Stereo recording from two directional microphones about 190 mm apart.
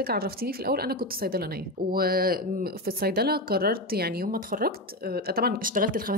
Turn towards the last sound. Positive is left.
turn(degrees=-50)  # may be behind; listen again after turning